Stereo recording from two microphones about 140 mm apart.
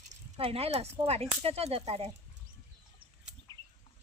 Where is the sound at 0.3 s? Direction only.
45° right (ahead or behind).